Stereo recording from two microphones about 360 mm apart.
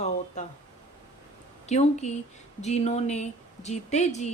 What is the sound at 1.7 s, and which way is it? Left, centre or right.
Speech, centre.